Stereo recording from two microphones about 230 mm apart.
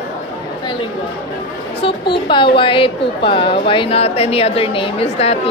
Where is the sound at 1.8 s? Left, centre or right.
Left.